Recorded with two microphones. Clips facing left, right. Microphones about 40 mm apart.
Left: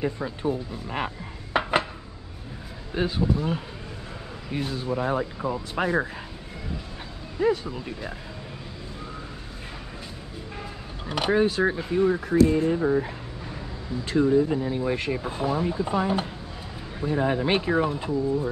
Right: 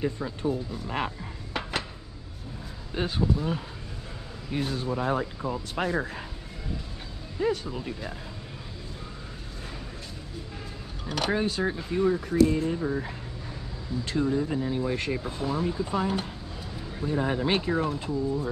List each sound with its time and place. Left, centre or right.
0.0 s speech: centre
1.5 s dishes: left
2.9 s speech: centre
7.3 s speech: centre
11.2 s speech: centre
14.0 s speech: centre
15.2 s speech: left